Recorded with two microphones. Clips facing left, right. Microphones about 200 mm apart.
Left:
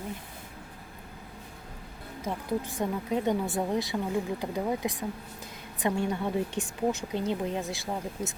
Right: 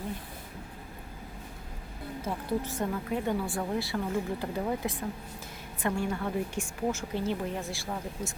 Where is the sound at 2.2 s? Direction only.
15° left (ahead or behind).